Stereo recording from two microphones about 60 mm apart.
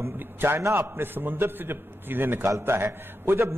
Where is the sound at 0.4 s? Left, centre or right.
Right.